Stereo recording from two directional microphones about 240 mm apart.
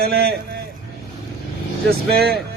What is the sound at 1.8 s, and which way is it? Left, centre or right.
Speech, right.